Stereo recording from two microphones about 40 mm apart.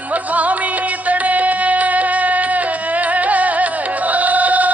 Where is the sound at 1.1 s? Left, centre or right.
Right.